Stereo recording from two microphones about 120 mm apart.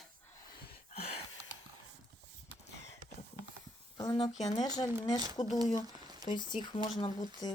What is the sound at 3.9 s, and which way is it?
Speech, 30° left (ahead or behind).